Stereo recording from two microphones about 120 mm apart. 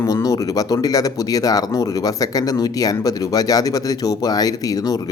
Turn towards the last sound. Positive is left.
turn(degrees=30)  # may be behind; listen again after turning